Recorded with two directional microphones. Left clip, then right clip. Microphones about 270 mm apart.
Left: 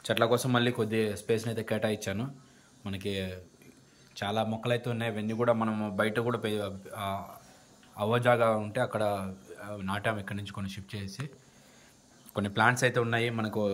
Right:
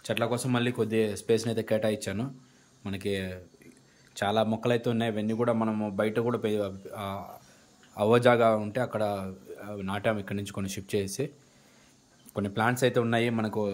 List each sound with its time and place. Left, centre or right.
0.0 s speech: centre
12.4 s speech: centre